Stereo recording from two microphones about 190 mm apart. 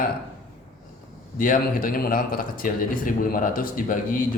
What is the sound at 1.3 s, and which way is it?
Speech, 45° left (ahead or behind).